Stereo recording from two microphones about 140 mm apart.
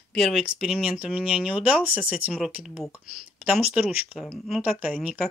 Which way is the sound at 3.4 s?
5° right (ahead or behind).